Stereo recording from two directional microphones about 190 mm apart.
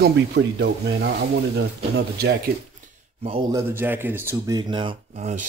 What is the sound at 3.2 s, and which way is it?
Speech, 30° right (ahead or behind).